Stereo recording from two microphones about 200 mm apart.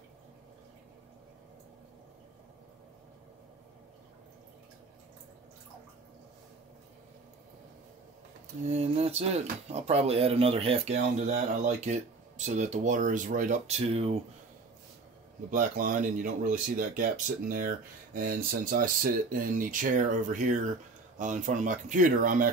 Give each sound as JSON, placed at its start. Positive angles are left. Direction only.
{"t": 8.6, "sound": "speech", "side_deg": -30}
{"t": 15.5, "sound": "speech", "side_deg": -40}